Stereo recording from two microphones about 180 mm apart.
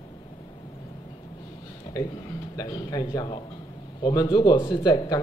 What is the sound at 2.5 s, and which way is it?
A man's voice, 20° left (ahead or behind).